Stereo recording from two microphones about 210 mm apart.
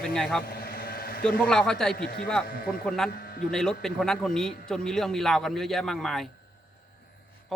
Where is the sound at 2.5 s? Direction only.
45° left (ahead or behind).